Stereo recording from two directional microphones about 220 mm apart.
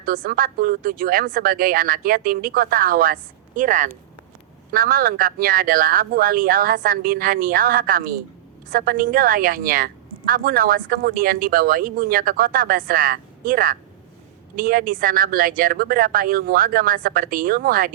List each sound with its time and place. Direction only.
0.0 s a woman's voice: 40° right (ahead or behind)